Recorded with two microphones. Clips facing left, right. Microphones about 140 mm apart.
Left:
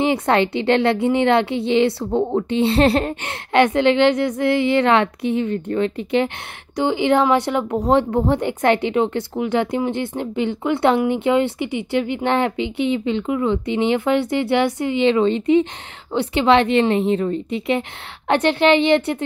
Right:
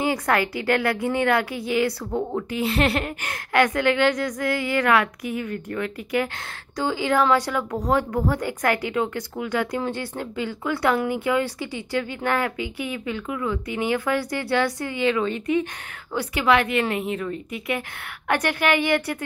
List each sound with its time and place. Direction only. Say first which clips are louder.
0.0 s speech: left 5 dB; 25° left (ahead or behind)